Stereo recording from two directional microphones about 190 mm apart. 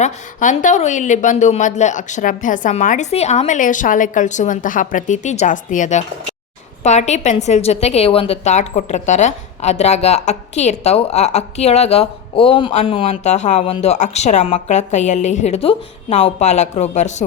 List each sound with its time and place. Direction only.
0.0 s a woman's voice: 40° left (ahead or behind)